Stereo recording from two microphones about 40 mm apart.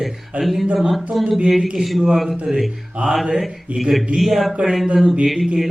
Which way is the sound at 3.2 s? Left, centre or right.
Centre.